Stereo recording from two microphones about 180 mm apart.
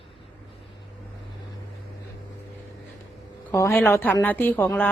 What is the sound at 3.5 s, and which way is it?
A man's voice, 15° left (ahead or behind).